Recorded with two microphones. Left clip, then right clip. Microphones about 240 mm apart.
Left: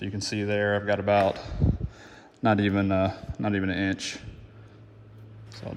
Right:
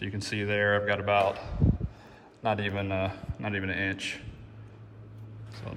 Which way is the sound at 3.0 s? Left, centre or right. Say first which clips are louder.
Left 5 dB; left.